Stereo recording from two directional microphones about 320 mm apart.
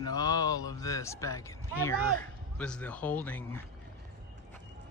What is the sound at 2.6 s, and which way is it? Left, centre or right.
Speech, centre.